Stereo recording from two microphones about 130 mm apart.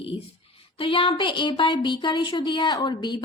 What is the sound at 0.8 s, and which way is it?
Speech, 40° left (ahead or behind).